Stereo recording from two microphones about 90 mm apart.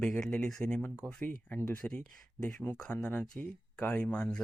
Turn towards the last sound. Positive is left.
turn(degrees=10)  # may be behind; listen again after turning